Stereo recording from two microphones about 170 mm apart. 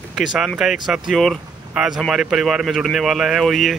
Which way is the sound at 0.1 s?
Centre (ahead or behind).